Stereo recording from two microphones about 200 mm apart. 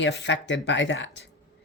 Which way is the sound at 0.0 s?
60° left (ahead or behind).